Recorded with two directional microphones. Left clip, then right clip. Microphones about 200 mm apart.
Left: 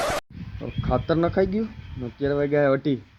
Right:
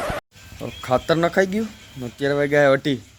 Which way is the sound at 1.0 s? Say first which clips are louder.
Right 4 dB; 30° right (ahead or behind).